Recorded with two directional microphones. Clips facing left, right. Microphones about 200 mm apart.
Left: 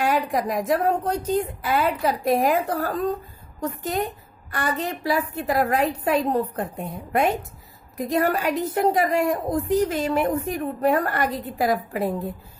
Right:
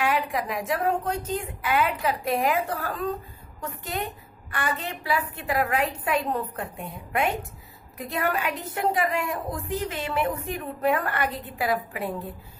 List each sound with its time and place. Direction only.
0.0 s a woman's voice: 40° left (ahead or behind)